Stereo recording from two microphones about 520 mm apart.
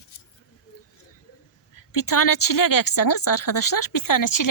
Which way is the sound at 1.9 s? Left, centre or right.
Left.